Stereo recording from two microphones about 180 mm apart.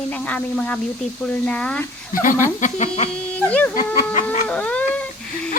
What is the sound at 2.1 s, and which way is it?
Speech, 50° left (ahead or behind).